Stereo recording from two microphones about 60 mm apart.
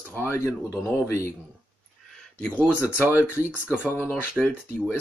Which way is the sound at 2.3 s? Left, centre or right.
Left.